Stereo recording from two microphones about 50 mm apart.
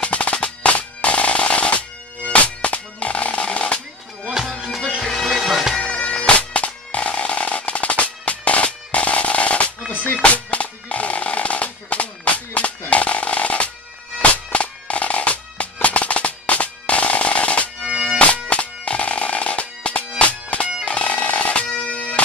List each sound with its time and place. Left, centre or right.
0.0 s percussion: left
4.2 s music: centre
5.0 s bagpipes: centre
5.8 s bagpipes: left
10.3 s music: left
12.9 s drum: left
14.3 s music: left
17.8 s bagpipes: centre
18.1 s music: left